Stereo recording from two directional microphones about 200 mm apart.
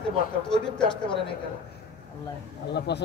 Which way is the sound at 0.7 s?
5° left (ahead or behind).